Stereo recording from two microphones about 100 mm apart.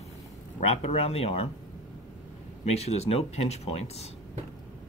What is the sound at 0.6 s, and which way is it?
Speech, 90° left.